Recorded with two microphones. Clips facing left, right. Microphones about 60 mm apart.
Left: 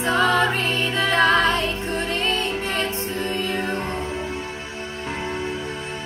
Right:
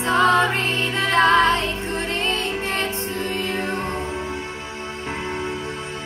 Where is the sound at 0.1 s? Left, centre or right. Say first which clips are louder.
Right 2 dB; right.